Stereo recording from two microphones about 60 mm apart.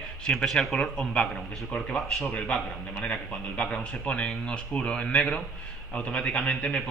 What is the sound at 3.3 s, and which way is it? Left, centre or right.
A man's voice, centre.